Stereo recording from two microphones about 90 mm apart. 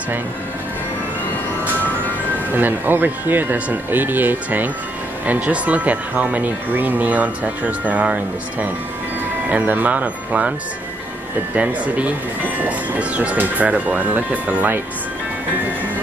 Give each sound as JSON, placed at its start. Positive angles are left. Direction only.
{"t": 2.5, "sound": "speech", "side_deg": -20}
{"t": 11.5, "sound": "speech", "side_deg": -15}